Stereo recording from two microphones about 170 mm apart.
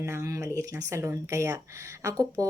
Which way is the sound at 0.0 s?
15° right (ahead or behind).